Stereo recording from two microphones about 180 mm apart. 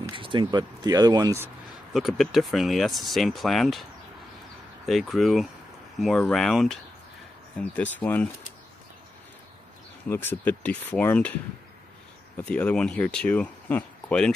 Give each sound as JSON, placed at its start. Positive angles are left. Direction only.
{"t": 0.1, "sound": "speech", "side_deg": -25}
{"t": 2.0, "sound": "speech", "side_deg": 0}
{"t": 4.8, "sound": "speech", "side_deg": 0}
{"t": 10.0, "sound": "speech", "side_deg": 10}
{"t": 12.4, "sound": "speech", "side_deg": 5}